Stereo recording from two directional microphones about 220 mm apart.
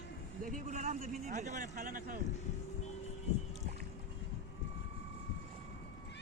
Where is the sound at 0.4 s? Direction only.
35° right (ahead or behind).